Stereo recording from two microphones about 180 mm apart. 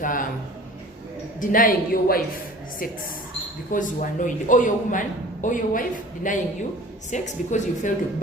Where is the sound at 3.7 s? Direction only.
45° left (ahead or behind).